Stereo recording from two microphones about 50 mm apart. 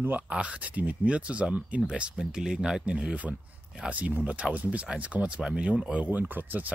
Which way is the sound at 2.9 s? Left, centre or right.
Right.